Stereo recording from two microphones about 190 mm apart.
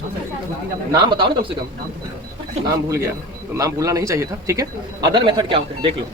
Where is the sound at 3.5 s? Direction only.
15° right (ahead or behind).